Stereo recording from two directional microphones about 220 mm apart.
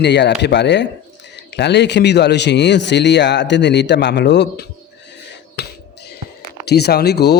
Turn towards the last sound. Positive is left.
turn(degrees=50)  # may be behind; listen again after turning